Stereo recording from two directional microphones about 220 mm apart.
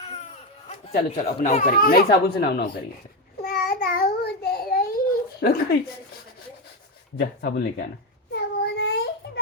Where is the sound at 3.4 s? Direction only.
45° left (ahead or behind).